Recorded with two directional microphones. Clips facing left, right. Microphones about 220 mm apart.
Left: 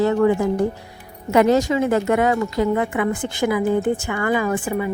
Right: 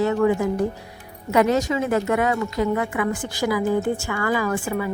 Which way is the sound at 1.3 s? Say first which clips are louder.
Left 3 dB; 30° left (ahead or behind).